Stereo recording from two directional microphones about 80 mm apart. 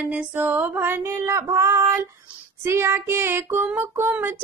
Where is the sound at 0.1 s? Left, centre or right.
Right.